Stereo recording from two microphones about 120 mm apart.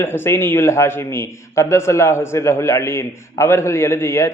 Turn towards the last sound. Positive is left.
turn(degrees=20)  # may be behind; listen again after turning